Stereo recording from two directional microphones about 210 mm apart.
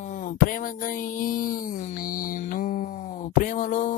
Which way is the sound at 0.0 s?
40° left (ahead or behind).